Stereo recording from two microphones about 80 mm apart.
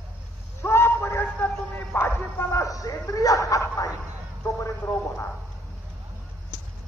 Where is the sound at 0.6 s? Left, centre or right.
Left.